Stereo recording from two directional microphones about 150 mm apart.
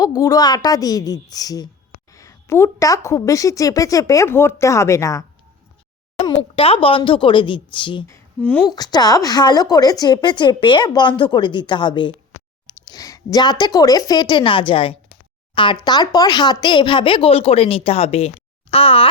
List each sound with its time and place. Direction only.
0.0 s a woman's voice: 25° left (ahead or behind)
6.6 s speech: 40° left (ahead or behind)
8.4 s a woman's voice: 10° left (ahead or behind)
8.7 s a woman's voice: 25° left (ahead or behind)